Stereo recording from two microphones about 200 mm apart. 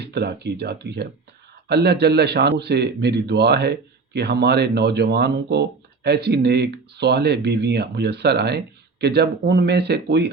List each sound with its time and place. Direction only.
0.0 s speech: 55° right (ahead or behind)